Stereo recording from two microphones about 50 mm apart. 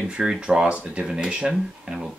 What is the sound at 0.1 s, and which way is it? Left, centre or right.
Speech, centre.